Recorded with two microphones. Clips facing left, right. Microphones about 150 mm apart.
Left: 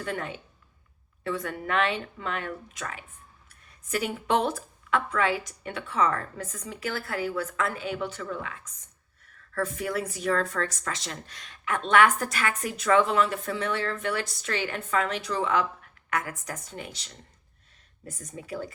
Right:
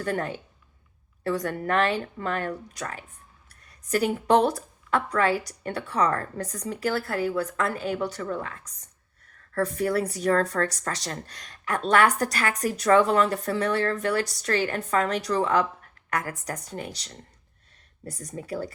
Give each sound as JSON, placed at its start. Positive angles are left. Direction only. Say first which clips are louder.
{"t": 0.0, "sound": "a woman's voice", "louder": "right 5 dB", "side_deg": -40}